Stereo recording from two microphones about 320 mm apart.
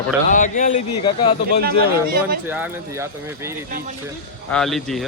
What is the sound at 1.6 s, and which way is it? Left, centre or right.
Speech, right.